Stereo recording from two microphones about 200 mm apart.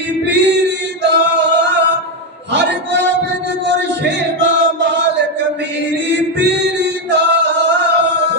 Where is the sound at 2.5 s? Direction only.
60° right (ahead or behind).